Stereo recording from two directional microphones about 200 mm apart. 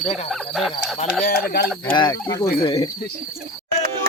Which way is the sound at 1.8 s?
20° left (ahead or behind).